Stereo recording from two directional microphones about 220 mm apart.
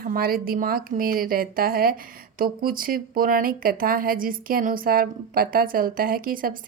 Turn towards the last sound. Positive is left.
turn(degrees=-40)  # may be behind; listen again after turning